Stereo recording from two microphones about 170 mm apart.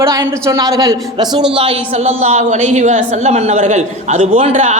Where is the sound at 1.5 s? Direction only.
35° right (ahead or behind).